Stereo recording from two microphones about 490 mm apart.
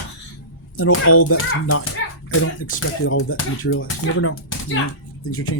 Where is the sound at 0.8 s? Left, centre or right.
Left.